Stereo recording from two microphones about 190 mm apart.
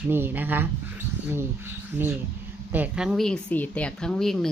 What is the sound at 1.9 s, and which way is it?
Speech, 10° right (ahead or behind).